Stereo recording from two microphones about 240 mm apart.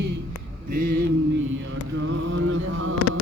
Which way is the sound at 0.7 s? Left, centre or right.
Right.